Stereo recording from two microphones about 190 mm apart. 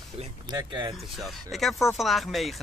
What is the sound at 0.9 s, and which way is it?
A woman's voice, centre (ahead or behind).